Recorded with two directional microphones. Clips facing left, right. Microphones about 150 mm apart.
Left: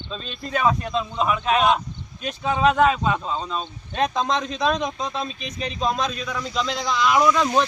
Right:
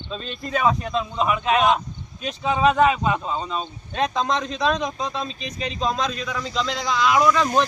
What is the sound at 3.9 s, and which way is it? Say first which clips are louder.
A man's voice: even; 5° left (ahead or behind).